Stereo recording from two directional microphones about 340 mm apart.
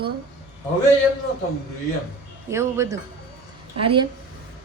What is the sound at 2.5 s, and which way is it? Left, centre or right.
A woman's voice, centre.